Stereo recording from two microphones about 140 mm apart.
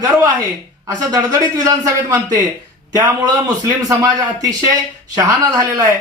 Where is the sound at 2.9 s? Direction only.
25° right (ahead or behind).